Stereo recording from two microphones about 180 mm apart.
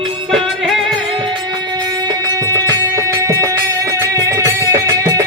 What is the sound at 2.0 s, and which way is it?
Music, 20° right (ahead or behind).